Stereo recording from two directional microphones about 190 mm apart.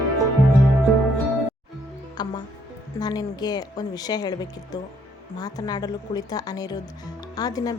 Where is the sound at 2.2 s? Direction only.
20° left (ahead or behind).